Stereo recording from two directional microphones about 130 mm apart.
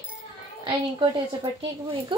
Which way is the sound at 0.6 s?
40° right (ahead or behind).